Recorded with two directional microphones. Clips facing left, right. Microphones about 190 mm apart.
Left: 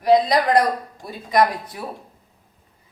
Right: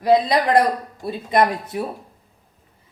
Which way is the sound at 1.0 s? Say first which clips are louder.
Right 1 dB; 25° right (ahead or behind).